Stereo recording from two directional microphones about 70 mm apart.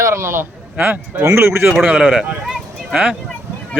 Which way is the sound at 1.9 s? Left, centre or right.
Centre.